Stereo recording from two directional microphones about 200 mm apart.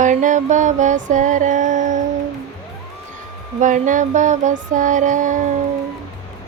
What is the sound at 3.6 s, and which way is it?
Music, 40° right (ahead or behind).